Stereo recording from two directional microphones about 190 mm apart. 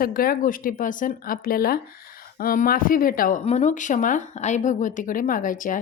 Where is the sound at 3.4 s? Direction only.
35° left (ahead or behind).